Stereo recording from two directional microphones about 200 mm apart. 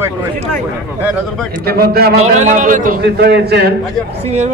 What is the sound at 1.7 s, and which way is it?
Speech, 50° right (ahead or behind).